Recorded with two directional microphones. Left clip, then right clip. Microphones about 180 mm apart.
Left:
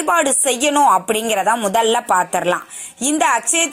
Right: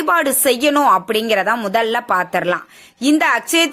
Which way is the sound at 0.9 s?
5° right (ahead or behind).